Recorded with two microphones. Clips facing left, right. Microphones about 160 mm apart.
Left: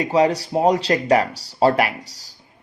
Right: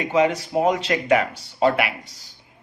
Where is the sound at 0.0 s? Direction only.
35° left (ahead or behind).